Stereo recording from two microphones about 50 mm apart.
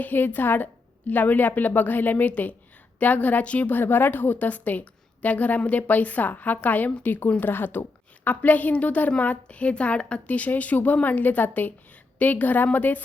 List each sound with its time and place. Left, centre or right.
0.0 s a woman's voice: left